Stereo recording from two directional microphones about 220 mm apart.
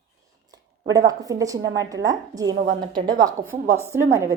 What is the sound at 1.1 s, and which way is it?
Female singing, 15° right (ahead or behind).